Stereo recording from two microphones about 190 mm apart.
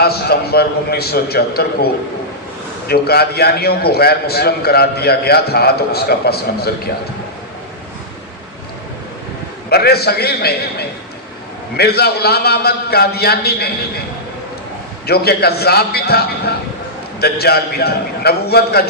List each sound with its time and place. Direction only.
0.0 s a man's voice: 55° left (ahead or behind)
9.6 s a man's voice: 55° left (ahead or behind)
15.0 s a man's voice: 55° left (ahead or behind)